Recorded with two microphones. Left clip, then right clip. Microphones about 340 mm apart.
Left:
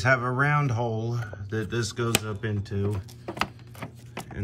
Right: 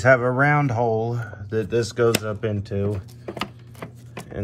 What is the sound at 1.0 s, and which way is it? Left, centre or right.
Speech, right.